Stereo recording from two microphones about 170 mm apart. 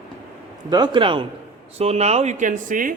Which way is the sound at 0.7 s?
25° right (ahead or behind).